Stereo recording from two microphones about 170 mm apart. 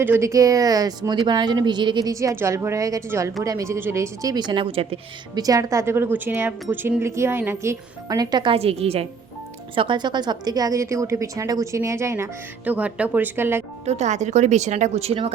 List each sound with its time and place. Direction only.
0.0 s speech: 15° right (ahead or behind); by 5.4 s 35° right (ahead or behind)
5.4 s a woman's voice: 20° right (ahead or behind)
13.8 s speech: 40° right (ahead or behind)